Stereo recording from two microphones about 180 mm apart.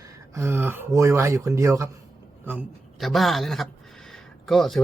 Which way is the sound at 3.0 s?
Centre (ahead or behind).